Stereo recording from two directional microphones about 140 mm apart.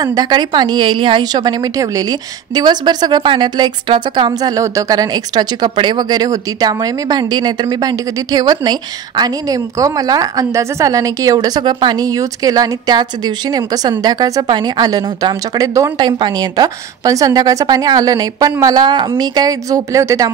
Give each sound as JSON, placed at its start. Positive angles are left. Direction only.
{"t": 0.0, "sound": "a woman's voice", "side_deg": -30}